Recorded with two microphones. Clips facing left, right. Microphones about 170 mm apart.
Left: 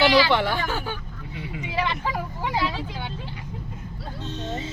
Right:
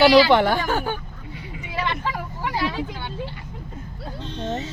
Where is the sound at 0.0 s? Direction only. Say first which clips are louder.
Right 5 dB; 45° right (ahead or behind).